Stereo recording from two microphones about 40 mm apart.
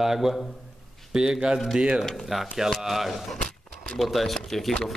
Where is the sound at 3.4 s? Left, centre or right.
Centre.